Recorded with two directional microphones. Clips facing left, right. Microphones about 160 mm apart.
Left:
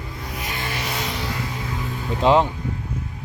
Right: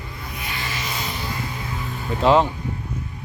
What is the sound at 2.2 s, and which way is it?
Speech, 15° left (ahead or behind).